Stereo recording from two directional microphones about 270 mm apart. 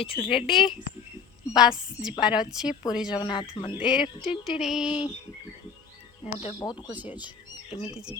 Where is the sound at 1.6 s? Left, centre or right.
Centre.